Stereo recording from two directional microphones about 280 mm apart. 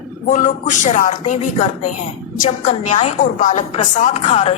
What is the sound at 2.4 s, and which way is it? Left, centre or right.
A woman's voice, left.